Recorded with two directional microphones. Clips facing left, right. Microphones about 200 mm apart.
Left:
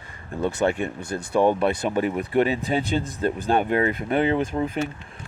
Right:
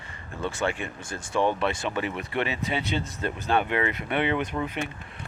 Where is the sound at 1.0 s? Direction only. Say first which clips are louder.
Left 5 dB; 45° left (ahead or behind).